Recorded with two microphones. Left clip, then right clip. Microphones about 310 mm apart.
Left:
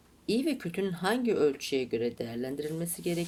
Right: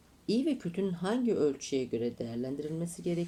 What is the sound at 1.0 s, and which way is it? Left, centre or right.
Speech, left.